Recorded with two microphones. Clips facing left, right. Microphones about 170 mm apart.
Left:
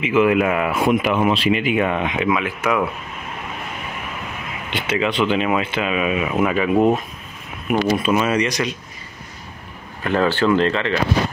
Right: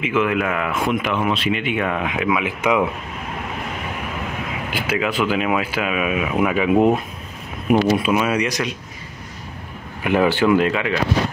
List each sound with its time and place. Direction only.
0.0 s speech: 5° left (ahead or behind)
2.4 s speech: 15° right (ahead or behind)
4.6 s speech: 5° right (ahead or behind)
10.0 s speech: 15° right (ahead or behind)